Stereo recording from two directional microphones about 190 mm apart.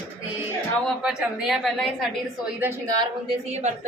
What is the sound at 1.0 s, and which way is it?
Speech, 5° right (ahead or behind).